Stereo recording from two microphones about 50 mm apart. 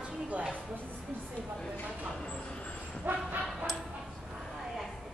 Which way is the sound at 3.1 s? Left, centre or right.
Right.